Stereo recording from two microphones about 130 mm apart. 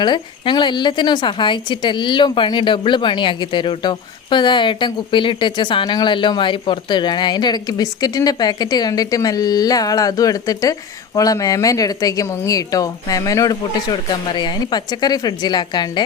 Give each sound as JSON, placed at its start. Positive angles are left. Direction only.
{"t": 0.0, "sound": "speech", "side_deg": 35}